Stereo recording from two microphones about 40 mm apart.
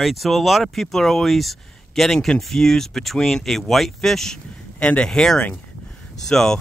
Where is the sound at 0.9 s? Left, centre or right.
Centre.